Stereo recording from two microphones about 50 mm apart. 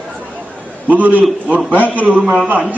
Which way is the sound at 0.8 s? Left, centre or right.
Right.